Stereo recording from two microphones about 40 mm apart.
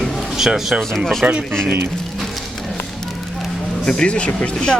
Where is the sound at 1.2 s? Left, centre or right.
Right.